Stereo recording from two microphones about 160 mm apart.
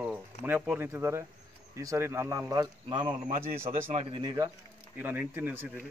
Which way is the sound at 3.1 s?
55° right (ahead or behind).